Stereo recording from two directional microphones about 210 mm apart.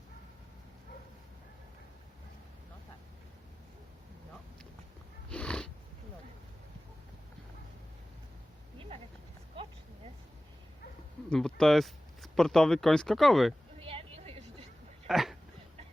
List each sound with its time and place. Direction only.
5.3 s cat: 5° left (ahead or behind)
11.3 s speech: 5° left (ahead or behind)
13.7 s a sound: 25° right (ahead or behind)
15.0 s dog: centre (ahead or behind)